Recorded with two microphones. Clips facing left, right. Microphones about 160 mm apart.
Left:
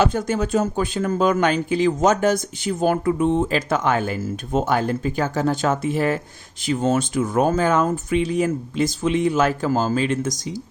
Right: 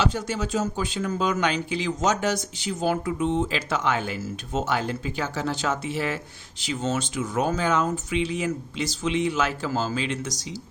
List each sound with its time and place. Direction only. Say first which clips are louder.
0.0 s speech: left 6 dB; 50° left (ahead or behind)